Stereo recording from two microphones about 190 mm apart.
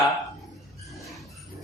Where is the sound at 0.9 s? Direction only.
Centre (ahead or behind).